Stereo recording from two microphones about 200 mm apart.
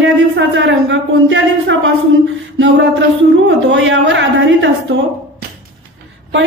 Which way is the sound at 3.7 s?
65° right (ahead or behind).